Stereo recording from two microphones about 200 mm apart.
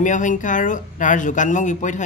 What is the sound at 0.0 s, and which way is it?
Speech, 40° left (ahead or behind).